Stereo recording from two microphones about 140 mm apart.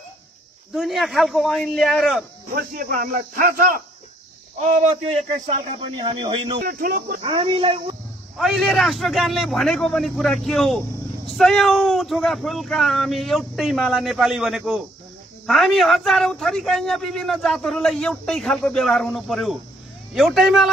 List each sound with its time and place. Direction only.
0.7 s a man's voice: centre (ahead or behind)
2.5 s speech: 85° right
4.6 s speech: 55° right (ahead or behind)
5.9 s speech: 35° right (ahead or behind)
6.6 s speech: 90° right
7.2 s speech: 40° right (ahead or behind)
8.4 s a man's voice: centre (ahead or behind)